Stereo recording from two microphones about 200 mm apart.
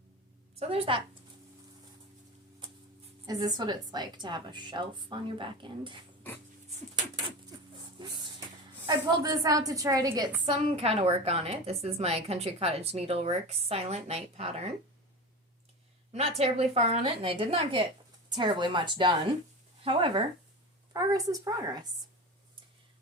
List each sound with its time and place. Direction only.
0.6 s a woman's voice: 30° right (ahead or behind)
3.2 s a woman's voice: 20° right (ahead or behind)
8.9 s a woman's voice: 20° right (ahead or behind)
16.1 s a woman's voice: 30° right (ahead or behind)